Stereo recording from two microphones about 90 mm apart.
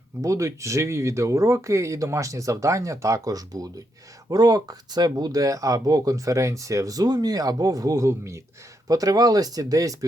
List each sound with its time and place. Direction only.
0.2 s speech: 35° right (ahead or behind)